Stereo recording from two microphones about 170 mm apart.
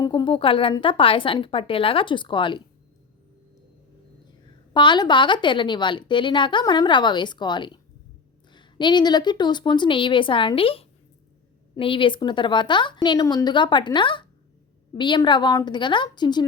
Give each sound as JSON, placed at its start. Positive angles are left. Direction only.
{"t": 0.0, "sound": "speech", "side_deg": 25}
{"t": 4.7, "sound": "a woman's voice", "side_deg": 25}